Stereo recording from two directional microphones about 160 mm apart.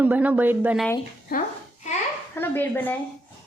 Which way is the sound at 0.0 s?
10° right (ahead or behind).